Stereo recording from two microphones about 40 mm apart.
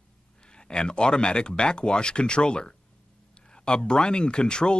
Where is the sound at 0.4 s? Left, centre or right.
Left.